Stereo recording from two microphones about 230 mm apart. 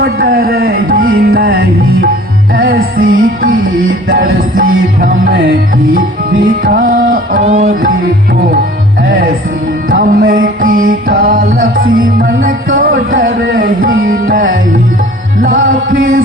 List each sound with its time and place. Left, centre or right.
0.0 s music: right
9.0 s music: right